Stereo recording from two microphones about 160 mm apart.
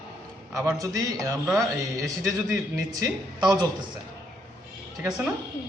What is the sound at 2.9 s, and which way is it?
Speech, 25° right (ahead or behind).